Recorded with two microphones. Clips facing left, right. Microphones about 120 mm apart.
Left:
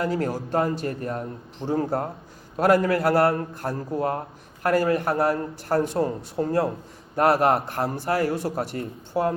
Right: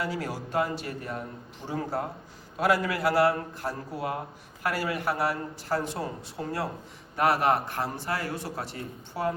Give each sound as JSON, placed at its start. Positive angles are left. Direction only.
{"t": 0.0, "sound": "speech", "side_deg": 45}